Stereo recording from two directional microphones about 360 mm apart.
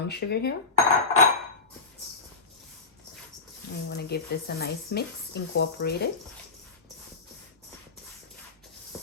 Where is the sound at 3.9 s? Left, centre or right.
Left.